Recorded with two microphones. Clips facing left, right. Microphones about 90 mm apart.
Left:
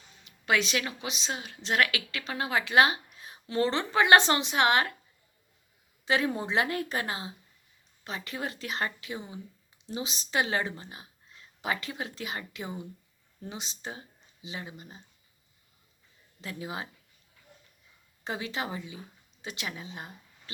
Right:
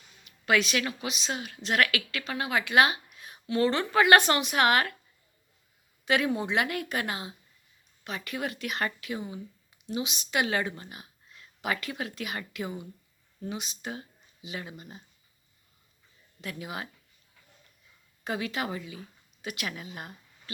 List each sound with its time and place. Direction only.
0.3 s a woman's voice: 25° left (ahead or behind)
6.1 s a woman's voice: 30° left (ahead or behind)
16.4 s a woman's voice: 25° left (ahead or behind)
18.3 s a woman's voice: 25° left (ahead or behind)